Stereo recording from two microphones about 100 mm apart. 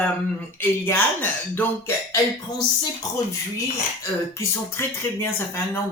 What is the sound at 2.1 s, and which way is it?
Music, 40° left (ahead or behind).